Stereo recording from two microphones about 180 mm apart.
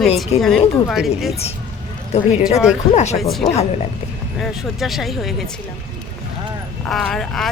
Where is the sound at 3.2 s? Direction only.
Centre (ahead or behind).